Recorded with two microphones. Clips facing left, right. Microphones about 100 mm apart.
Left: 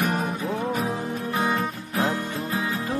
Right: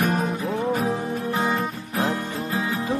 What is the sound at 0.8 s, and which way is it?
Music, centre (ahead or behind).